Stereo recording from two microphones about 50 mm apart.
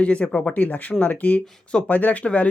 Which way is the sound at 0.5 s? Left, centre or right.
Left.